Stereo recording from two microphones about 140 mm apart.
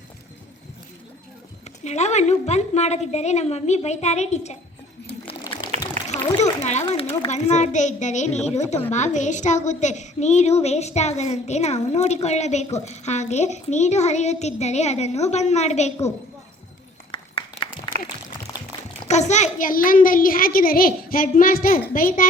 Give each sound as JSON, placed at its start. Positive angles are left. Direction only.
{"t": 1.8, "sound": "a woman's voice", "side_deg": 55}
{"t": 5.7, "sound": "a sound", "side_deg": -55}
{"t": 6.1, "sound": "speech", "side_deg": 55}
{"t": 6.8, "sound": "a woman's voice", "side_deg": 40}
{"t": 17.1, "sound": "applause", "side_deg": 40}
{"t": 18.5, "sound": "a sound", "side_deg": 20}
{"t": 19.0, "sound": "a child's voice", "side_deg": 55}